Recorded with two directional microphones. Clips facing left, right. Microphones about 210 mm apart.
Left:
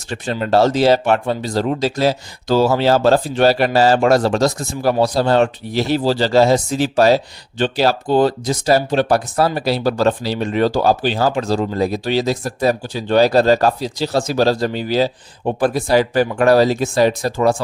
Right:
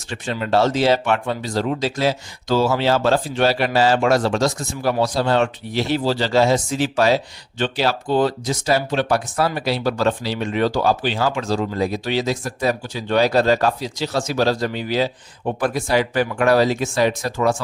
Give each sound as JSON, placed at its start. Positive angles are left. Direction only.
{"t": 0.1, "sound": "speech", "side_deg": 40}